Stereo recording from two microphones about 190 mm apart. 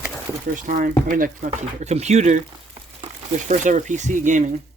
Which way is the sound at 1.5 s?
35° right (ahead or behind).